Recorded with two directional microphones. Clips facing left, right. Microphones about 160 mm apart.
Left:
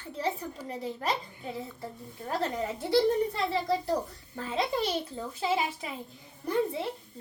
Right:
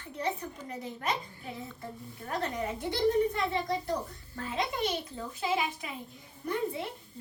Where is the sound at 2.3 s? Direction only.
30° left (ahead or behind).